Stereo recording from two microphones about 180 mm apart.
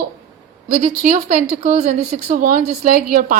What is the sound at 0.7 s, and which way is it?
A woman's voice, 40° right (ahead or behind).